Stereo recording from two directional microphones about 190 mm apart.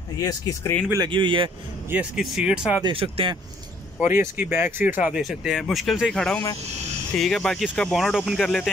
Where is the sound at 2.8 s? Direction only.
30° right (ahead or behind).